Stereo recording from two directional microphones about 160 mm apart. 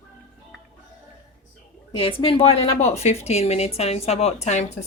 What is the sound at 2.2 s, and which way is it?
A woman's voice, 35° left (ahead or behind).